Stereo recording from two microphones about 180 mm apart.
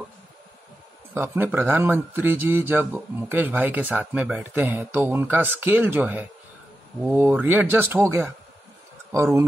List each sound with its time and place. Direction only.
1.1 s speech: 10° right (ahead or behind)